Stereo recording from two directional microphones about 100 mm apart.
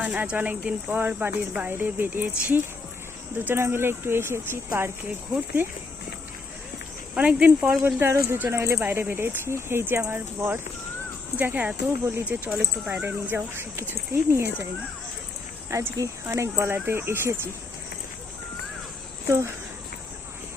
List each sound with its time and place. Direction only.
0.0 s speech: 15° right (ahead or behind)
7.1 s speech: 15° right (ahead or behind)
8.0 s speech: 25° right (ahead or behind); by 12.9 s 10° right (ahead or behind)
13.0 s speech: 20° right (ahead or behind)
16.0 s speech: 30° right (ahead or behind)
19.3 s speech: 25° right (ahead or behind)